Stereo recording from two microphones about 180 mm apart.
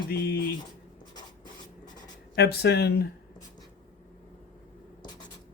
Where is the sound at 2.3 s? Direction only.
65° left (ahead or behind).